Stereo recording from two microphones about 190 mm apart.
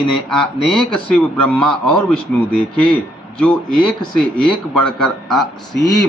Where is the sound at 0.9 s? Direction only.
50° right (ahead or behind).